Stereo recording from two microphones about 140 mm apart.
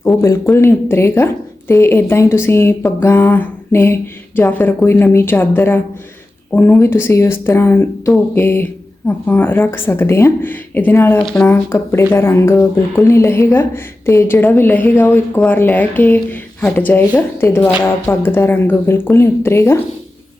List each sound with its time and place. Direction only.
0.0 s speech: 20° left (ahead or behind)